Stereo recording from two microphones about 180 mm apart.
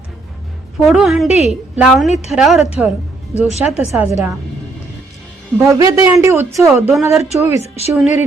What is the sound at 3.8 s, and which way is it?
Speech, 10° right (ahead or behind).